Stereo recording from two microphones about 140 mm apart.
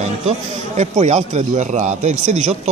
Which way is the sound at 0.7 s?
55° right (ahead or behind).